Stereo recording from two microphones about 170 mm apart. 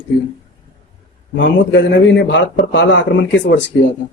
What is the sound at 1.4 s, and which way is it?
Speech, 90° left.